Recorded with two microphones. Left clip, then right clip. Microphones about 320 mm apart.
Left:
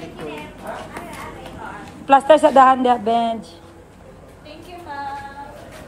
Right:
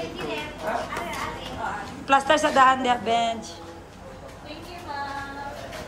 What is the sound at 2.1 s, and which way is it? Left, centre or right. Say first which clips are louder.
A woman's voice: left 8 dB; centre.